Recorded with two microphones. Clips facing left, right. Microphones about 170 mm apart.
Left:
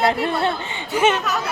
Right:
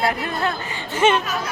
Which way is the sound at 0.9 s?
10° left (ahead or behind).